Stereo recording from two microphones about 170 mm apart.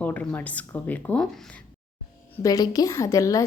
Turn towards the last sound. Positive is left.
turn(degrees=20)  # may be behind; listen again after turning